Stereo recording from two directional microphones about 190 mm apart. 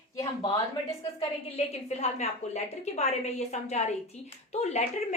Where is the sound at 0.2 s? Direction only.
15° left (ahead or behind).